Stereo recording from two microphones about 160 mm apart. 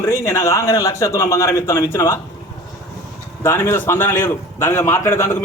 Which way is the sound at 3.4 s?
15° left (ahead or behind).